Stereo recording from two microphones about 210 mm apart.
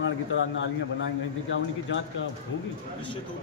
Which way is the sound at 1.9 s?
60° left (ahead or behind).